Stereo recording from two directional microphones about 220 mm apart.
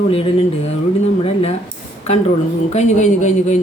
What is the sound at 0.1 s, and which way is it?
Speech, 25° left (ahead or behind).